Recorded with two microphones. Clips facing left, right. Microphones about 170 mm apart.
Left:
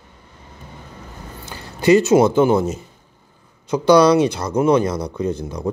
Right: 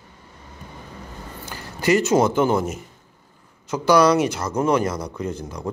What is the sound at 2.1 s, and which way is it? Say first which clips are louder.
Speech: left 4 dB; 15° left (ahead or behind).